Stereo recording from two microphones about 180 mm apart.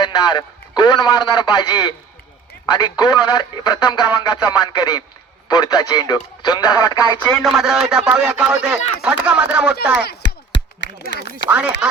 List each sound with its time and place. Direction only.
0.0 s speech: 25° left (ahead or behind)
7.4 s speech: centre (ahead or behind)
10.0 s a sound: 65° left (ahead or behind)
10.8 s speech: 80° left
11.4 s speech: 5° right (ahead or behind)